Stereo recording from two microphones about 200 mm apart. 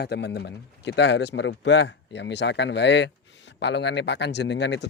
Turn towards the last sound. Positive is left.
turn(degrees=60)  # may be behind; listen again after turning